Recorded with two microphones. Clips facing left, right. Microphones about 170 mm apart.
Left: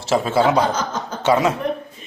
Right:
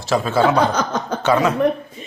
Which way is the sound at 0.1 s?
20° left (ahead or behind).